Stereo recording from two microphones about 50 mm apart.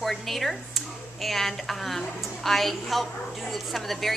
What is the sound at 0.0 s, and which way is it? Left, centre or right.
A woman's voice, centre.